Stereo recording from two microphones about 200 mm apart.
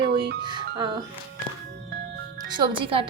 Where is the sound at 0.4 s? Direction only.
20° right (ahead or behind).